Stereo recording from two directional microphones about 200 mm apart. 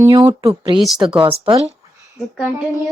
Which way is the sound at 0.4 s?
25° right (ahead or behind).